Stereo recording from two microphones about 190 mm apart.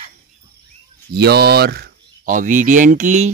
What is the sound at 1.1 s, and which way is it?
Speech, 55° right (ahead or behind).